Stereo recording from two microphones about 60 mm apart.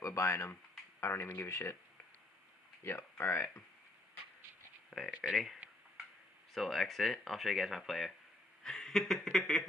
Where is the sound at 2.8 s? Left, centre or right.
Left.